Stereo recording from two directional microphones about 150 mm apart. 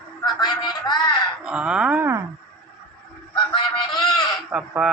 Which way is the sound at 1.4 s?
5° right (ahead or behind).